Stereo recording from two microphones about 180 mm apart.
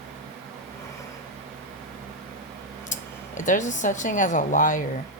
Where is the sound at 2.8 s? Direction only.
45° left (ahead or behind).